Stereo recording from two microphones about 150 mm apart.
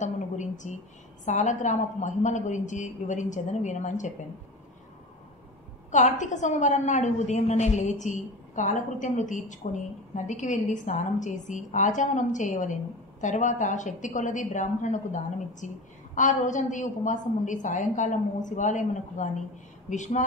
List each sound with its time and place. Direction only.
0.0 s a sound: 55° left (ahead or behind)
1.2 s a woman's voice: 55° left (ahead or behind)
5.9 s a woman's voice: 55° left (ahead or behind)